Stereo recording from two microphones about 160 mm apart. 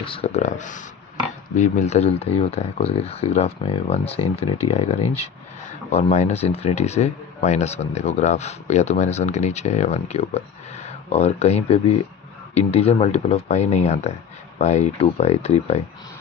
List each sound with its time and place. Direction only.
0.0 s speech: 35° left (ahead or behind)